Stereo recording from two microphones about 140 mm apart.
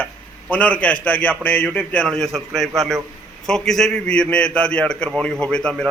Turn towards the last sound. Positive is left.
turn(degrees=5)  # may be behind; listen again after turning